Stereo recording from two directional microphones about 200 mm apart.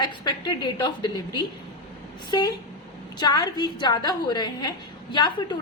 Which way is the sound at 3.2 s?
20° left (ahead or behind).